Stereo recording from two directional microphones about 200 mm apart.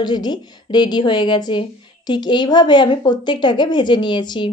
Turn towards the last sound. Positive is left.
turn(degrees=25)  # may be behind; listen again after turning